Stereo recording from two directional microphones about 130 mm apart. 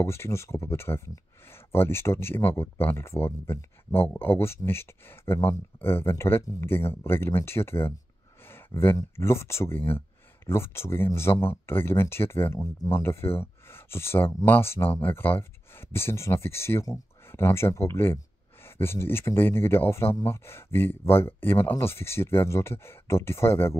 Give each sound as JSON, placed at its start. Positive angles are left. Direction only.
{"t": 0.0, "sound": "speech", "side_deg": 20}